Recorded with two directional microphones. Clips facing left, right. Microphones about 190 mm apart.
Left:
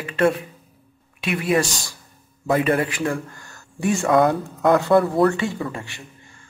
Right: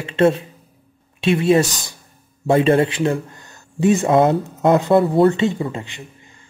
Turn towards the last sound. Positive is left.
turn(degrees=-20)  # may be behind; listen again after turning